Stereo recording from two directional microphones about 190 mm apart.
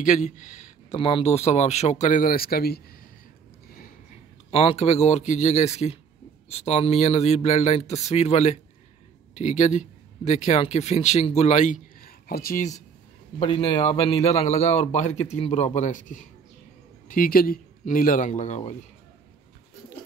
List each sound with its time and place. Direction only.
0.0 s speech: 40° left (ahead or behind)
4.5 s speech: 30° left (ahead or behind); by 12.7 s 45° left (ahead or behind)
13.4 s speech: 25° left (ahead or behind)